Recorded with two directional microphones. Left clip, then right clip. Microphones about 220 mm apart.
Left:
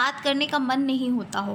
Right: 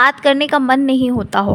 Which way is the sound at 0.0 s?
45° right (ahead or behind).